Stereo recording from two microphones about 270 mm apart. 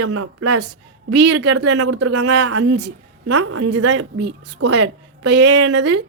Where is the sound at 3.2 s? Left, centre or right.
Right.